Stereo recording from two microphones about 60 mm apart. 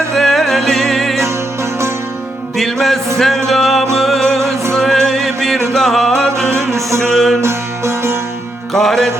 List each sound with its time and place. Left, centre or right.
0.2 s music: centre
2.6 s music: centre
7.4 s music: right
8.7 s music: centre